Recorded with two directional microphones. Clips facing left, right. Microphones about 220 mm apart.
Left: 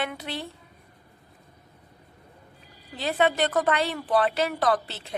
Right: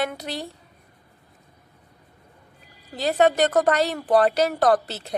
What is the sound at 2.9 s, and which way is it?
A woman's voice, 40° right (ahead or behind).